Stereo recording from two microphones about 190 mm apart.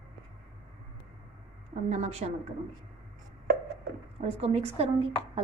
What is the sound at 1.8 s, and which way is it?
Speech, 35° right (ahead or behind).